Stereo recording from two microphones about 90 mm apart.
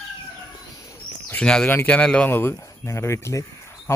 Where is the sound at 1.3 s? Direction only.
10° left (ahead or behind).